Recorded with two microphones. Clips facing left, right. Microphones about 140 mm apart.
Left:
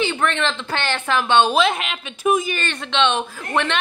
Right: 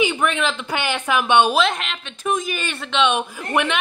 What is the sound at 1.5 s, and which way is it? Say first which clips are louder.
A woman's voice: left 1 dB; centre (ahead or behind).